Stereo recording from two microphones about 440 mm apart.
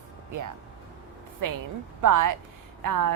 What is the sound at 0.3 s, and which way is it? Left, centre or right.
Speech, right.